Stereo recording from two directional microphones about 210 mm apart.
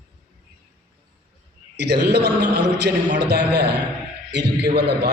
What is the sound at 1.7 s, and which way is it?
A man's voice, 50° right (ahead or behind).